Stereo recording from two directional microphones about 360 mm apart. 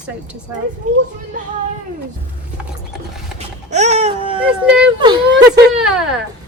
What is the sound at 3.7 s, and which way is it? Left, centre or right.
Baby cry, centre.